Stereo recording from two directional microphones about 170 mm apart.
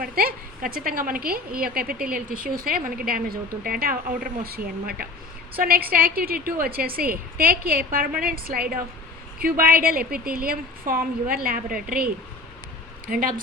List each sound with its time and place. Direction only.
0.0 s a woman's voice: 60° right (ahead or behind)